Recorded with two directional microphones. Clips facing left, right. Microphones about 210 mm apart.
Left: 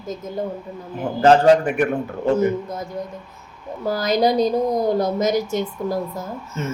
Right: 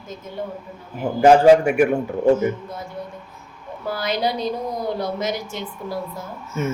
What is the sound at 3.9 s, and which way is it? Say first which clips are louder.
A woman's voice: left 5 dB; 40° left (ahead or behind).